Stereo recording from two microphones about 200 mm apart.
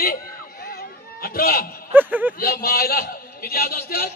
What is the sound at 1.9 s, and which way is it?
Speech, 10° right (ahead or behind).